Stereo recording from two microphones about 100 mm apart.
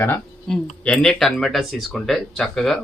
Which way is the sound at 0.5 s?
5° left (ahead or behind).